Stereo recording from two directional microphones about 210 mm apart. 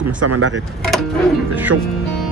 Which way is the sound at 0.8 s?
Centre (ahead or behind).